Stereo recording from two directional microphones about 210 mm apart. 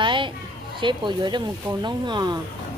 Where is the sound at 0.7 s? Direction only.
20° right (ahead or behind).